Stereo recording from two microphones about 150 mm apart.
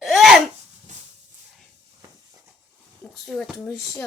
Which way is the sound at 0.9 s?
50° right (ahead or behind).